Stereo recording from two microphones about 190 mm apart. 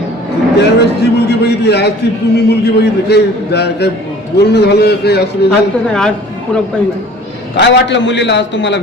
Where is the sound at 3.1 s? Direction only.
60° left (ahead or behind).